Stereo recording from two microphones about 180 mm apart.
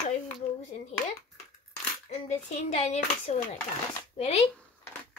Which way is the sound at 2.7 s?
35° left (ahead or behind).